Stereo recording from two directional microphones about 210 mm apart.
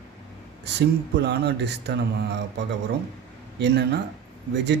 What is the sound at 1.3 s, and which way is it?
Speech, 50° right (ahead or behind).